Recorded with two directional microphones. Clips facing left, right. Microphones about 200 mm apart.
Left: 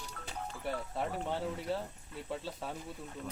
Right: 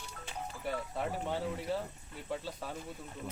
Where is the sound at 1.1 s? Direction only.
5° right (ahead or behind).